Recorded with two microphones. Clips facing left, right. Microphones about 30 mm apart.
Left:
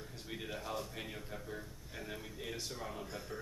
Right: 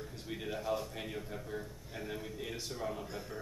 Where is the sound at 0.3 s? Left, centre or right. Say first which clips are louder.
Right 5 dB; centre.